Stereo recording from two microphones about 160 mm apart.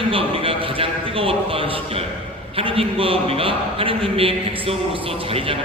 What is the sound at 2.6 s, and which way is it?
A man's voice, 35° right (ahead or behind).